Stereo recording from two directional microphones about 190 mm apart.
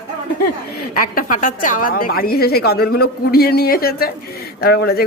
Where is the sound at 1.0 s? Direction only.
45° left (ahead or behind).